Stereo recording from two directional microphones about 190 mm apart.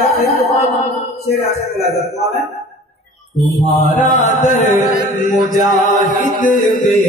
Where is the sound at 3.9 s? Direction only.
40° left (ahead or behind).